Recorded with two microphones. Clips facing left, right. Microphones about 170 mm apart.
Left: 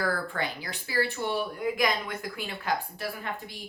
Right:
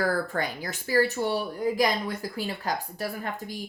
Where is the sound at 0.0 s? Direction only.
45° right (ahead or behind).